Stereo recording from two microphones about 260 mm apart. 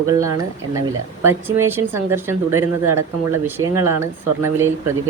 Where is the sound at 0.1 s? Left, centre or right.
Centre.